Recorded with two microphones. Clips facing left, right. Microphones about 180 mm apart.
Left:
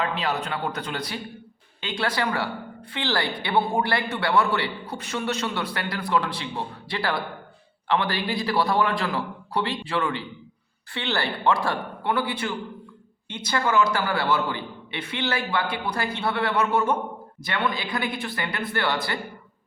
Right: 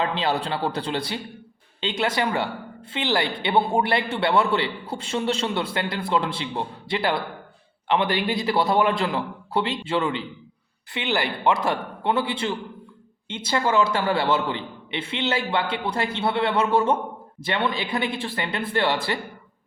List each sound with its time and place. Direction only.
0.0 s a man's voice: 25° right (ahead or behind)